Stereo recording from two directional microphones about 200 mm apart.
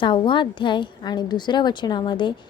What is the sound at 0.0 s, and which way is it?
A woman's voice, 25° left (ahead or behind).